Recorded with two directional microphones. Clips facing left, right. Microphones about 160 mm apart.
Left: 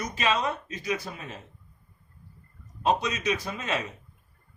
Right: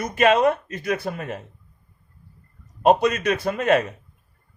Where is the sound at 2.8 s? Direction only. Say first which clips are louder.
Right 8 dB; 60° right (ahead or behind).